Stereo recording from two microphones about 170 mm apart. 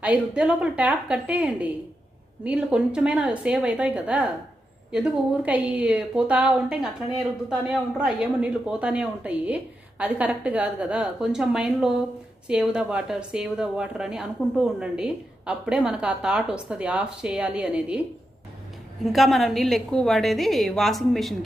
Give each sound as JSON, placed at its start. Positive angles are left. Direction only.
{"t": 0.0, "sound": "a woman's voice", "side_deg": -5}
{"t": 19.0, "sound": "a woman's voice", "side_deg": 0}